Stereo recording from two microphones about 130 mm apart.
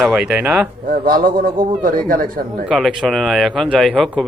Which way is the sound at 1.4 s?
90° right.